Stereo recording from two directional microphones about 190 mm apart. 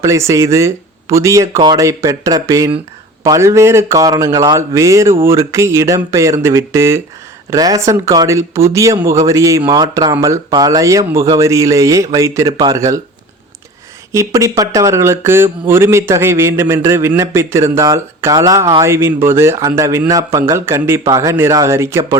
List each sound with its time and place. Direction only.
0.0 s speech: 15° right (ahead or behind)
14.1 s speech: 15° right (ahead or behind)